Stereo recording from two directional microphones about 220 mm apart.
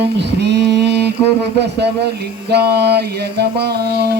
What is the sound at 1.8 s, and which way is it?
Mantra, 50° right (ahead or behind).